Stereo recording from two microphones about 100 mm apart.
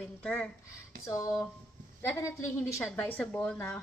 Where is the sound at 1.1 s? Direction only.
30° left (ahead or behind).